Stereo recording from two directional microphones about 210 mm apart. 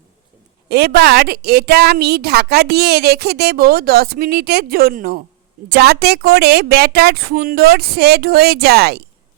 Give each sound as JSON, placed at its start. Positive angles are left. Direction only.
{"t": 0.7, "sound": "a woman's voice", "side_deg": -50}